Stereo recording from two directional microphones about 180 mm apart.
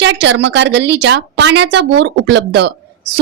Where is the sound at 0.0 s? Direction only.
80° right.